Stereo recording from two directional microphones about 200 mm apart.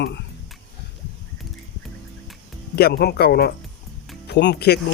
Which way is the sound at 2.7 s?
50° left (ahead or behind).